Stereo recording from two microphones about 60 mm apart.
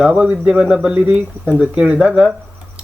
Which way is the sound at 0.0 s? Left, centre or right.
Centre.